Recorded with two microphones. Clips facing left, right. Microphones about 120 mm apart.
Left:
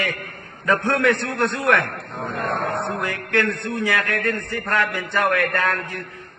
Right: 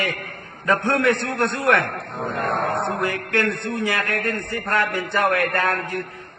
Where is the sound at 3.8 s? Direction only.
30° right (ahead or behind).